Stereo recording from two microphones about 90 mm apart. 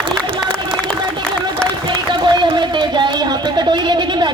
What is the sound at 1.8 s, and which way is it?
Speech, 60° right (ahead or behind).